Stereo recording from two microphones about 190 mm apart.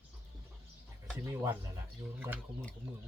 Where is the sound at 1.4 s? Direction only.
15° right (ahead or behind).